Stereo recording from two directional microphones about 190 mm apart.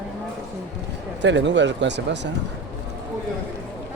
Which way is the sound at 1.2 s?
70° right (ahead or behind).